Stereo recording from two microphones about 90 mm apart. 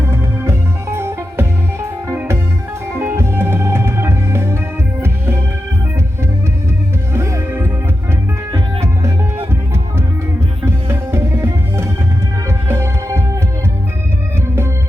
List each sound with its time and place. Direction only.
0.0 s music: 30° right (ahead or behind)
7.1 s music: 35° right (ahead or behind)
10.7 s music: 30° right (ahead or behind)
14.4 s music: 30° right (ahead or behind)